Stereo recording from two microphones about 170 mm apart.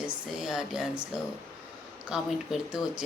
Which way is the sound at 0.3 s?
5° right (ahead or behind).